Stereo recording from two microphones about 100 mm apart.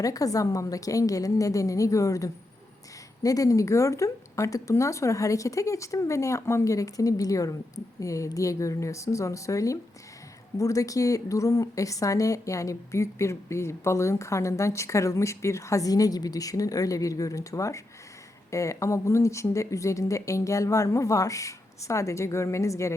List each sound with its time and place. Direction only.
0.0 s a woman's voice: 35° left (ahead or behind)